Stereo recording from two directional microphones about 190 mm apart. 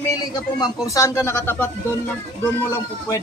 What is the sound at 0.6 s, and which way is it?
Speech, 15° left (ahead or behind).